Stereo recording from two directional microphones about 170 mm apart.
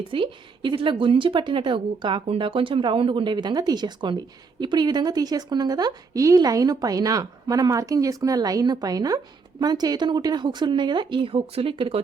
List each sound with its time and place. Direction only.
0.1 s speech: 30° right (ahead or behind)